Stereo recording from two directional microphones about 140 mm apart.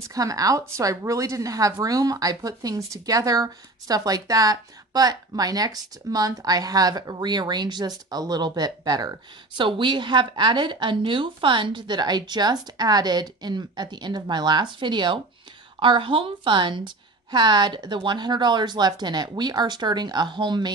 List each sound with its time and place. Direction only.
0.1 s a woman's voice: 25° right (ahead or behind)